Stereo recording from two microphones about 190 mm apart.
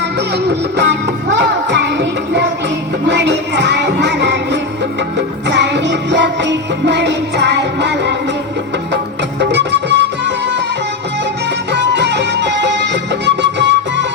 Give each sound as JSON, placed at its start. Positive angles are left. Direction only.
{"t": 0.4, "sound": "music", "side_deg": -65}
{"t": 9.4, "sound": "music", "side_deg": -70}
{"t": 11.7, "sound": "music", "side_deg": -70}